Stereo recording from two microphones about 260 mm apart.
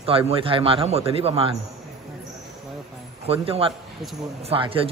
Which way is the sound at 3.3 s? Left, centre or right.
Right.